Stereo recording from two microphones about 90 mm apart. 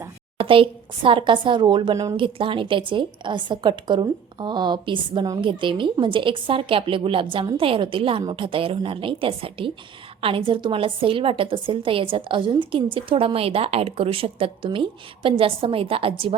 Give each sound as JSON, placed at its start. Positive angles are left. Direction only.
{"t": 0.3, "sound": "a woman's voice", "side_deg": -85}
{"t": 2.1, "sound": "a woman's voice", "side_deg": -75}